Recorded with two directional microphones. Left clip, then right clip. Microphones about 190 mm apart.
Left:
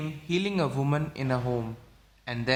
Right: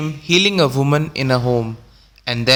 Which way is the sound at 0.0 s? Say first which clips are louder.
Right 15 dB; 35° right (ahead or behind).